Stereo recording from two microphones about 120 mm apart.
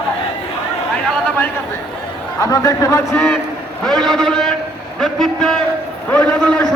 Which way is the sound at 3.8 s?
5° left (ahead or behind).